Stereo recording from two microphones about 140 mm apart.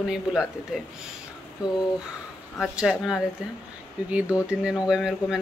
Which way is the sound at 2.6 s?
5° right (ahead or behind).